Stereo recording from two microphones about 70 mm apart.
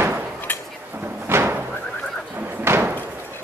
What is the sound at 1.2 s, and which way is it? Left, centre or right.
Slam, right.